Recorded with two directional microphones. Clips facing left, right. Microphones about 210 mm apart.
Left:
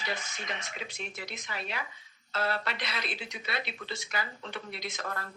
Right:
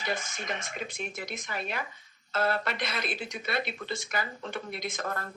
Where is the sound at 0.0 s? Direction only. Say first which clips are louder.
Right 4 dB; 50° right (ahead or behind).